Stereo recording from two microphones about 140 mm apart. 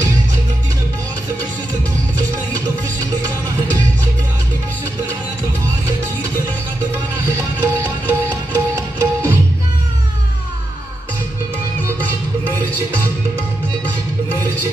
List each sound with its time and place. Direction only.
7.6 s music: 15° right (ahead or behind)